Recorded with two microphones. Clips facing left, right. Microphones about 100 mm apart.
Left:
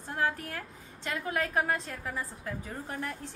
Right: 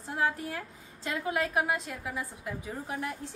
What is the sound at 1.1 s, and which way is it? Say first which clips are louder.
A woman's voice: right 1 dB; 15° right (ahead or behind).